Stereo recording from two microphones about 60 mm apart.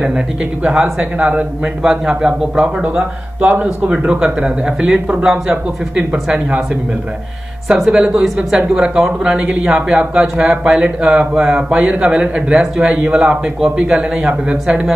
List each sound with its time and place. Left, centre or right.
0.7 s a man's voice: centre
1.1 s a man's voice: right
2.8 s a man's voice: right
7.6 s a man's voice: centre